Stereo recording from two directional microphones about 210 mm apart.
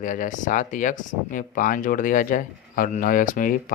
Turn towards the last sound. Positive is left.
turn(degrees=40)  # may be behind; listen again after turning